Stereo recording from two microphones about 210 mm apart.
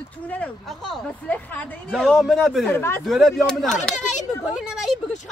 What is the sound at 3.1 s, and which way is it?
Speech, centre (ahead or behind).